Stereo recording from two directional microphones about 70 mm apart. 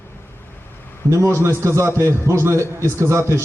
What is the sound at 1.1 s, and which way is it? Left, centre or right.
A man's voice, right.